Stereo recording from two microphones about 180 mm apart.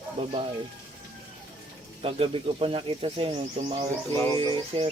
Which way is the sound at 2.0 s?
30° right (ahead or behind).